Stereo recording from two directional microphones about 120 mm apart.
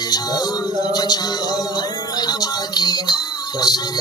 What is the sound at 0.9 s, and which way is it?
Music, 35° left (ahead or behind).